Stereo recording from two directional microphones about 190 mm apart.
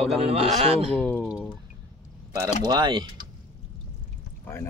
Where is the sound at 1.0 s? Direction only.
5° left (ahead or behind).